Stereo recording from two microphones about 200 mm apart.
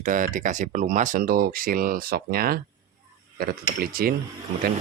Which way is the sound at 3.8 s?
50° right (ahead or behind).